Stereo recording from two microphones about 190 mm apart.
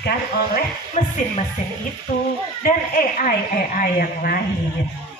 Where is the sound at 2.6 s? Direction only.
45° left (ahead or behind).